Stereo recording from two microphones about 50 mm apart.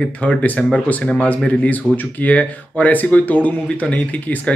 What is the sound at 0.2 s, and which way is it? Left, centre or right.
Speech, left.